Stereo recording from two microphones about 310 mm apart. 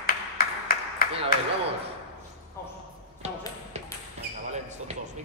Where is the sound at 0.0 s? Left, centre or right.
Left.